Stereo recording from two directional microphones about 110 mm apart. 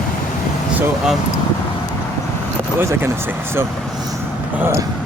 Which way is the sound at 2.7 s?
20° right (ahead or behind).